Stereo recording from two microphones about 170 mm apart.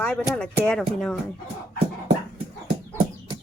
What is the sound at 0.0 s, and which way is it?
Speech, 10° left (ahead or behind).